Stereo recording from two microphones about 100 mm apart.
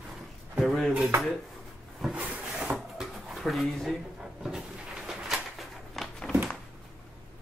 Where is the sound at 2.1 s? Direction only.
15° right (ahead or behind).